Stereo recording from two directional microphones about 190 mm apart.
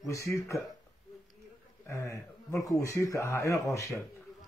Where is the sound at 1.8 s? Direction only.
15° left (ahead or behind).